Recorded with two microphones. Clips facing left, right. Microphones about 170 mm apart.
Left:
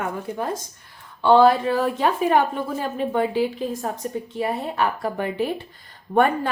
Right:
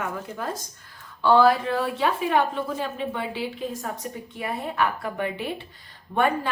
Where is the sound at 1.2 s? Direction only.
25° left (ahead or behind).